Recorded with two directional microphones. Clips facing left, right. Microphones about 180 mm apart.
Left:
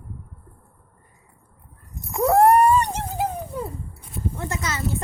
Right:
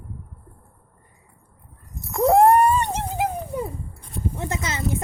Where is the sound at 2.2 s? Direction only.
20° right (ahead or behind).